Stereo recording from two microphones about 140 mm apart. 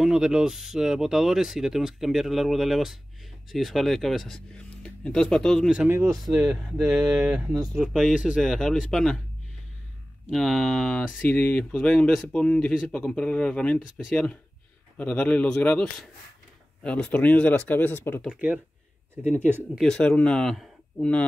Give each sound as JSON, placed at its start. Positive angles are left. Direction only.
{"t": 0.0, "sound": "speech", "side_deg": -5}
{"t": 5.8, "sound": "speech", "side_deg": -15}
{"t": 6.3, "sound": "speech", "side_deg": -5}
{"t": 10.3, "sound": "speech", "side_deg": 0}
{"t": 13.7, "sound": "speech", "side_deg": 0}
{"t": 18.3, "sound": "speech", "side_deg": -10}
{"t": 19.8, "sound": "speech", "side_deg": 5}